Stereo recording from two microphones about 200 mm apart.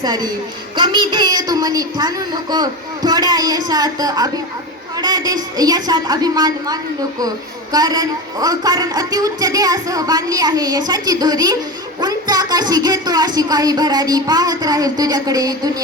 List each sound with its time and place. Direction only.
0.0 s a woman's voice: 20° right (ahead or behind)